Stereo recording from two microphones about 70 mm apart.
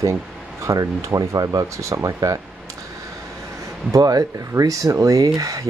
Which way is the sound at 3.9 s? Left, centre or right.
Right.